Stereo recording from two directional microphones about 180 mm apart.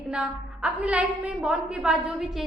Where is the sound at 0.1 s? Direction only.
5° right (ahead or behind).